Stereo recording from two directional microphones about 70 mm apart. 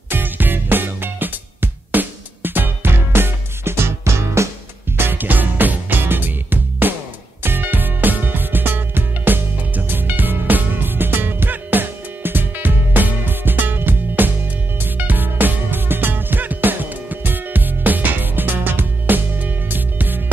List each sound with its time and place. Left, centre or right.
0.1 s music: right
4.9 s music: right